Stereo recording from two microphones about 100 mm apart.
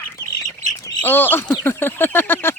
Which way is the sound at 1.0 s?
20° left (ahead or behind).